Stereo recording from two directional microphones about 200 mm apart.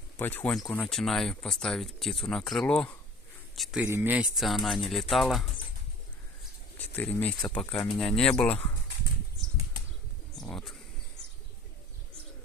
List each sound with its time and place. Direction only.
0.2 s speech: 10° left (ahead or behind)
6.9 s speech: 10° left (ahead or behind)
10.3 s a sound: centre (ahead or behind)